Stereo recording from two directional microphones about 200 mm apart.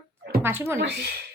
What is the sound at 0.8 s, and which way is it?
Speech, 55° right (ahead or behind).